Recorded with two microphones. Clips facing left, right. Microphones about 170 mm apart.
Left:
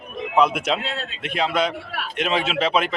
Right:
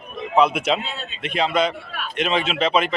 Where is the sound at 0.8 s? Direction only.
90° left.